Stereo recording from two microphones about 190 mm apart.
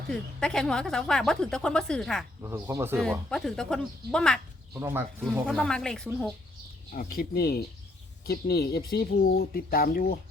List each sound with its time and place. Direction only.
0.1 s a woman's voice: 5° left (ahead or behind)
2.4 s speech: 15° right (ahead or behind)
3.0 s a woman's voice: centre (ahead or behind)
4.7 s speech: 15° right (ahead or behind)
5.2 s a woman's voice: centre (ahead or behind)
6.9 s speech: 50° left (ahead or behind)